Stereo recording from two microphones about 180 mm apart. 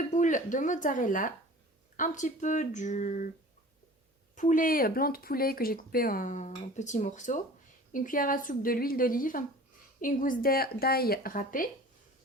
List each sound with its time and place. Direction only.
0.1 s speech: 45° left (ahead or behind)
4.4 s speech: 45° left (ahead or behind)